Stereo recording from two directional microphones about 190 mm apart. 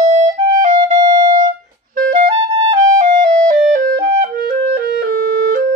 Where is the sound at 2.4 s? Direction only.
25° right (ahead or behind).